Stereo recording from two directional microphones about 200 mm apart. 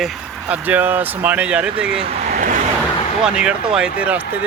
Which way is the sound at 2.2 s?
35° right (ahead or behind).